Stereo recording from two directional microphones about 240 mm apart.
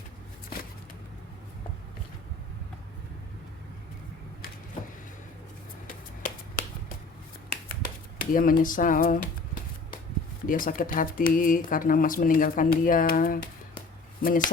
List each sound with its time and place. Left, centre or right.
5.9 s finger snapping: left
7.5 s a sound: left
10.4 s speech: left